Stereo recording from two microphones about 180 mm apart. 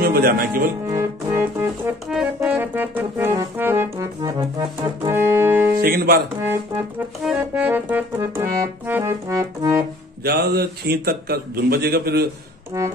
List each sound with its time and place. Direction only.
0.0 s music: 55° right (ahead or behind)
0.8 s organ: 15° right (ahead or behind)
2.0 s music: 5° right (ahead or behind)
5.8 s a man's voice: 55° right (ahead or behind)
7.2 s music: 5° right (ahead or behind)
10.2 s a man's voice: 60° right (ahead or behind)
12.7 s music: 15° right (ahead or behind)